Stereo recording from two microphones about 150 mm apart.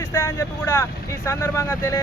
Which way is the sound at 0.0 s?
15° left (ahead or behind).